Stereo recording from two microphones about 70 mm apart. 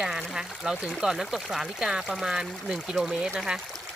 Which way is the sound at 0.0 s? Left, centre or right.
Centre.